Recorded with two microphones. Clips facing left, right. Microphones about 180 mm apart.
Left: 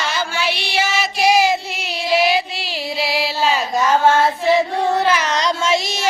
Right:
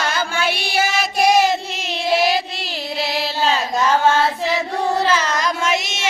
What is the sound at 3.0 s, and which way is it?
Female singing, 10° left (ahead or behind).